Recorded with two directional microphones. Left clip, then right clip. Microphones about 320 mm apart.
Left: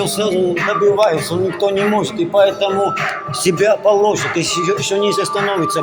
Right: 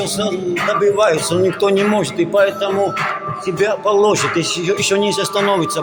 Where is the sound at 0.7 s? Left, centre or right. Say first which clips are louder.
Right 1 dB; centre.